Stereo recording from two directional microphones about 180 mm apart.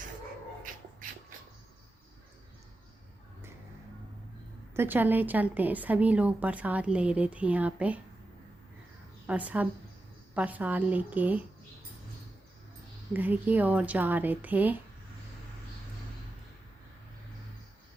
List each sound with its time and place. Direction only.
4.7 s a woman's voice: 10° right (ahead or behind)
9.2 s a woman's voice: 5° right (ahead or behind)
13.1 s a woman's voice: 10° right (ahead or behind)